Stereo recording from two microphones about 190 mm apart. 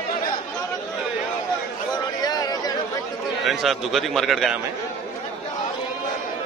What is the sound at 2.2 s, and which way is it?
Chatter, 20° left (ahead or behind).